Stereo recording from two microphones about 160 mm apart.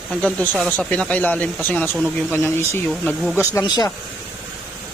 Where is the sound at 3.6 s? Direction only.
25° left (ahead or behind).